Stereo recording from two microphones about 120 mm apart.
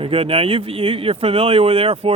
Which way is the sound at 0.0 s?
50° right (ahead or behind).